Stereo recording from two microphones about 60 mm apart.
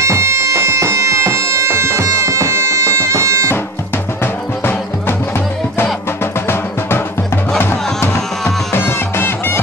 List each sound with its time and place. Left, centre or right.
0.0 s bagpipes: right
4.2 s music: left
6.4 s music: left